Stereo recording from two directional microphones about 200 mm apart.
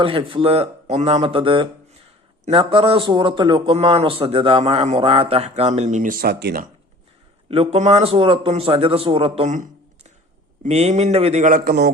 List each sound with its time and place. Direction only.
0.0 s a man's voice: 25° right (ahead or behind); by 6.7 s 50° right (ahead or behind)
7.4 s a man's voice: 30° right (ahead or behind); by 11.9 s 45° right (ahead or behind)